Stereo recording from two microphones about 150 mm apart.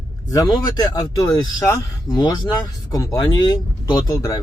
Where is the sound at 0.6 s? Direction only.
25° left (ahead or behind).